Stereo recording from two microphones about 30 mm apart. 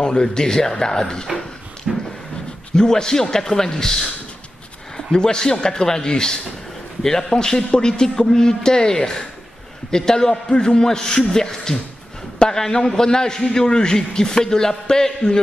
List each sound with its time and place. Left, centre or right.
0.0 s a man's voice: left
1.9 s a sound: centre
2.7 s a man's voice: left